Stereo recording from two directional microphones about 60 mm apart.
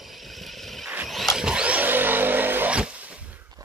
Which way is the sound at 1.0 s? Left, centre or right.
Centre.